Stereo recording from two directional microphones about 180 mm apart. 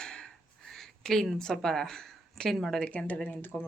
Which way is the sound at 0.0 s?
5° left (ahead or behind).